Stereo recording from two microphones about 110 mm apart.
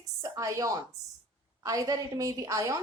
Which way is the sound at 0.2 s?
30° right (ahead or behind).